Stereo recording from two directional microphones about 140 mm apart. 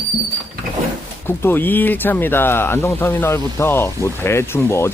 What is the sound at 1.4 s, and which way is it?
Speech, 15° left (ahead or behind).